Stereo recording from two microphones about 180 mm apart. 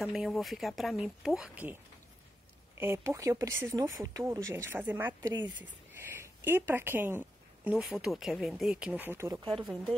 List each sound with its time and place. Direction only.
0.0 s speech: centre (ahead or behind)
2.8 s a woman's voice: 15° right (ahead or behind)